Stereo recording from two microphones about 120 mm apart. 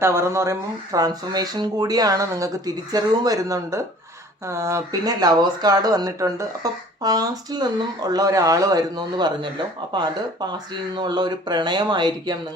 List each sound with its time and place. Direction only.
0.0 s speech: 20° right (ahead or behind); by 12.3 s 35° right (ahead or behind)